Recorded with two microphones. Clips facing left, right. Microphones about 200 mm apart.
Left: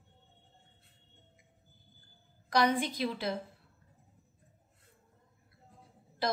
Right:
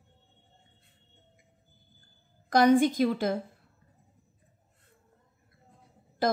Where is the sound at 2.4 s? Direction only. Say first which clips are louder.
Right 8 dB; 45° right (ahead or behind).